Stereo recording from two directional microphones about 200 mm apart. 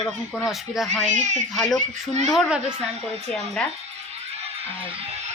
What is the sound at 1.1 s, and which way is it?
Speech, 35° right (ahead or behind).